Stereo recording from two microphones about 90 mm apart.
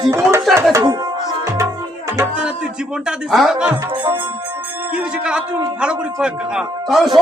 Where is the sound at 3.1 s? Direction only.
5° right (ahead or behind).